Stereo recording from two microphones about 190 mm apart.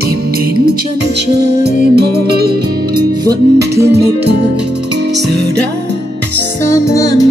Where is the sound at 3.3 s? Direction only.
15° right (ahead or behind).